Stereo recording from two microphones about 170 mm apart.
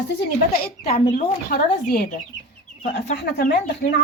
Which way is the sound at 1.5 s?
50° left (ahead or behind).